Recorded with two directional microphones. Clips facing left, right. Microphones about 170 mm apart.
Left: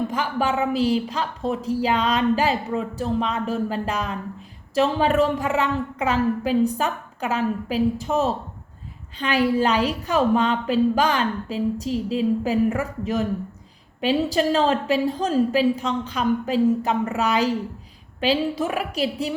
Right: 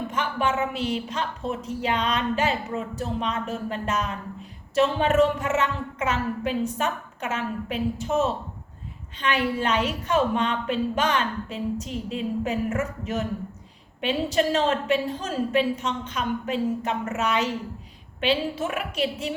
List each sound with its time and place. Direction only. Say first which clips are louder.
0.1 s a woman's voice: left 2 dB; 35° left (ahead or behind)